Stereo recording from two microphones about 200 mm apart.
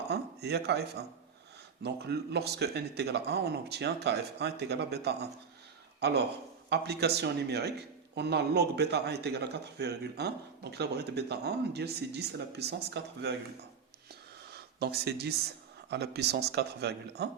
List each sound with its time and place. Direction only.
0.1 s a man's voice: 55° right (ahead or behind)
14.5 s a man's voice: 55° right (ahead or behind)